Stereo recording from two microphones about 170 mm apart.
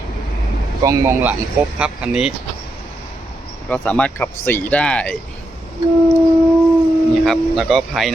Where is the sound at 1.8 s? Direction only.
5° right (ahead or behind).